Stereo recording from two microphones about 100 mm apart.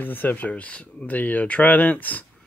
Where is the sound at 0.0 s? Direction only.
20° left (ahead or behind).